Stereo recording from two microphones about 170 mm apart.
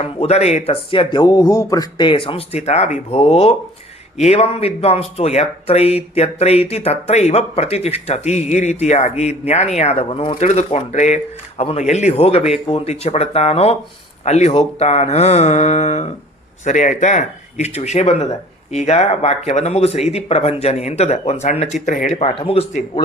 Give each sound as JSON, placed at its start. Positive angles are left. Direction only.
{"t": 0.2, "sound": "speech", "side_deg": 40}